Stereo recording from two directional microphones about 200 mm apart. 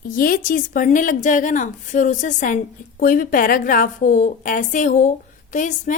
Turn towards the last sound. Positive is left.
turn(degrees=40)  # may be behind; listen again after turning